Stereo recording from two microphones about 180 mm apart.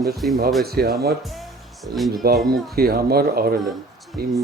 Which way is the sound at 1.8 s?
Centre (ahead or behind).